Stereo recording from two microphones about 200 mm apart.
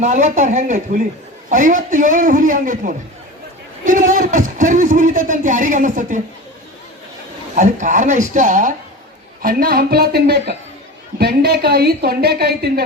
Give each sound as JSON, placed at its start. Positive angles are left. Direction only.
{"t": 0.0, "sound": "a man's voice", "side_deg": -35}
{"t": 7.5, "sound": "a man's voice", "side_deg": -40}